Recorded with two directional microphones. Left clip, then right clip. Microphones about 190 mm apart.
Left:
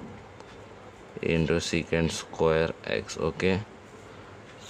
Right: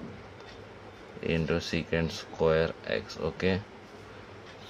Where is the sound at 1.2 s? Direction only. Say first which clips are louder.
Left 4 dB; 35° left (ahead or behind).